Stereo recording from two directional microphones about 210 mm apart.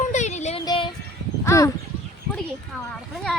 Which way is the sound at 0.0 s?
35° left (ahead or behind).